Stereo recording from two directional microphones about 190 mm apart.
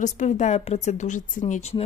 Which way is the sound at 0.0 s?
40° left (ahead or behind).